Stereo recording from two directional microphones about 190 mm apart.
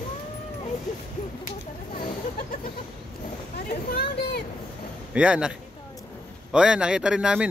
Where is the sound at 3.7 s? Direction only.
50° left (ahead or behind).